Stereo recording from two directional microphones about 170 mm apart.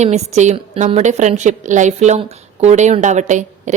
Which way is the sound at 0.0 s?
40° right (ahead or behind).